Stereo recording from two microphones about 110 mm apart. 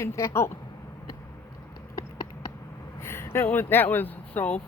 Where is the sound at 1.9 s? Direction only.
30° left (ahead or behind).